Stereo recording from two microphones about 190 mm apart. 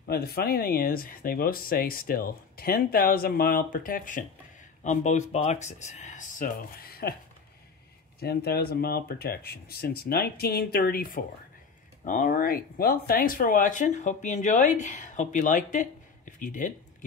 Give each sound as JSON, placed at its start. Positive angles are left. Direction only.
{"t": 0.1, "sound": "speech", "side_deg": 55}
{"t": 8.2, "sound": "speech", "side_deg": 55}